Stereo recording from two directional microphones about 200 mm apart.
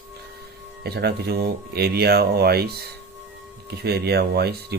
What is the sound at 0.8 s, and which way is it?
Speech, 55° right (ahead or behind).